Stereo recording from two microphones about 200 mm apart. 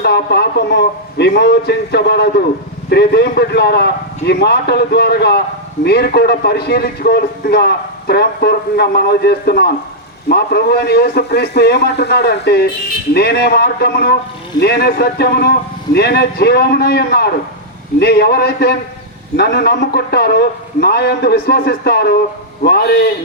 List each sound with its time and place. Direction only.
0.0 s a man's voice: 55° left (ahead or behind)